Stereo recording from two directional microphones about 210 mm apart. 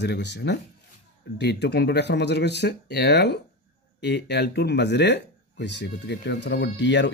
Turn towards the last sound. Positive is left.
turn(degrees=55)  # may be behind; listen again after turning